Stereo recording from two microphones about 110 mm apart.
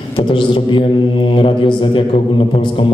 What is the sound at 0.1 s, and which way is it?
A man's voice, 50° left (ahead or behind).